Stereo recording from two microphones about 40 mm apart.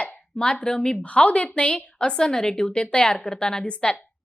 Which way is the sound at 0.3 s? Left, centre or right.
Left.